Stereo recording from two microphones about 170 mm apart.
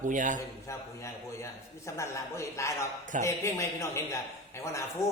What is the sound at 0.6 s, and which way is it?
A man's voice, 15° left (ahead or behind).